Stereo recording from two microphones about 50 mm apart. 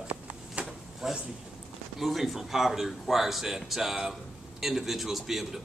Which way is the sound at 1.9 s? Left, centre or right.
Centre.